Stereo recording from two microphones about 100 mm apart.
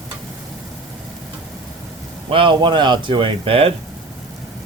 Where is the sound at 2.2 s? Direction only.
60° right (ahead or behind).